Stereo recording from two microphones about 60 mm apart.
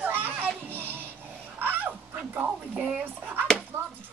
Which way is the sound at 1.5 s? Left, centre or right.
Right.